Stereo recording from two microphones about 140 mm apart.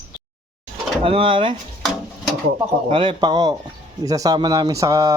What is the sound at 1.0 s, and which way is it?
Mantra, 40° right (ahead or behind).